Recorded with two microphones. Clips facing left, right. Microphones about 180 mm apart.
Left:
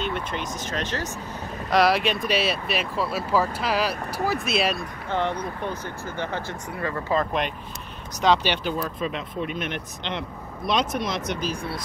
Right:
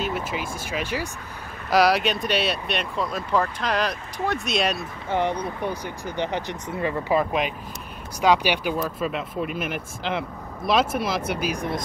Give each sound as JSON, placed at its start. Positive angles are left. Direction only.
{"t": 0.0, "sound": "speech", "side_deg": -5}
{"t": 5.1, "sound": "speech", "side_deg": -15}